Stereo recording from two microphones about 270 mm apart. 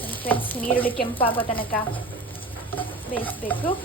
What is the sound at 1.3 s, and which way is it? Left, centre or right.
Speech, centre.